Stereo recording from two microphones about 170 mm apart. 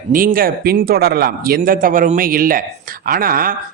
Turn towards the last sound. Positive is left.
turn(degrees=-60)  # may be behind; listen again after turning